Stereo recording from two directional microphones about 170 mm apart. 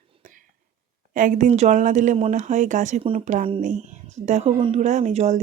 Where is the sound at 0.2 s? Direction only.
50° right (ahead or behind).